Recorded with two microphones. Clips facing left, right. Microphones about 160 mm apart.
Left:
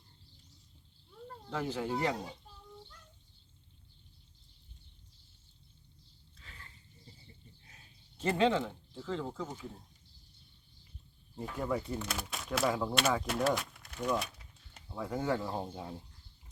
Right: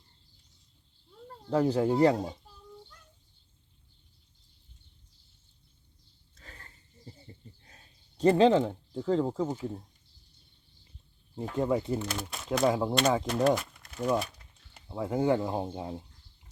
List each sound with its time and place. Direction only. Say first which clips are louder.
1.5 s speech: right 10 dB; 35° right (ahead or behind)
6.3 s a sound: right 4 dB; 45° right (ahead or behind)
11.3 s speech: right 7 dB; 25° right (ahead or behind)
12.0 s speech: right 4 dB; centre (ahead or behind)
12.6 s speech: right 6 dB; 25° right (ahead or behind)
13.2 s speech: right 6 dB; 5° left (ahead or behind)
13.6 s a sound: right 4 dB; centre (ahead or behind)
14.8 s speech: right 7 dB; 25° right (ahead or behind)